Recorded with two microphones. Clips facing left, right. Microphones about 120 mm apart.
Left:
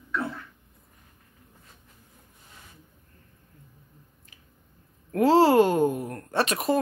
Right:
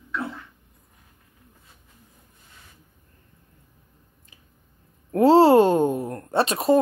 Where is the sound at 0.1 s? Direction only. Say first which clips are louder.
Even; 5° right (ahead or behind).